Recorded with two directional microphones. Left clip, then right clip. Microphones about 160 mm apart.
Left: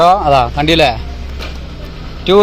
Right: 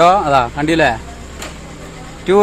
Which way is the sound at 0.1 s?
15° right (ahead or behind).